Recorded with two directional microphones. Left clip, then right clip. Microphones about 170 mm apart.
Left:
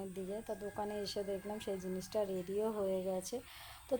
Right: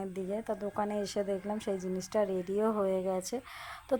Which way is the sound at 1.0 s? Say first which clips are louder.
Right 6 dB; 20° right (ahead or behind).